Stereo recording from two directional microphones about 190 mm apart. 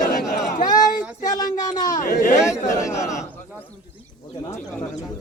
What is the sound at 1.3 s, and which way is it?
Child singing, 20° left (ahead or behind).